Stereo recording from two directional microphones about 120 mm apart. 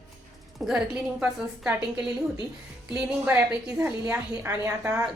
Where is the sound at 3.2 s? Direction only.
15° right (ahead or behind).